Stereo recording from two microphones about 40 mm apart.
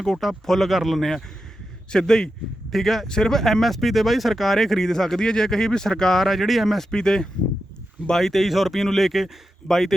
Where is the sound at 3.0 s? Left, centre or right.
Centre.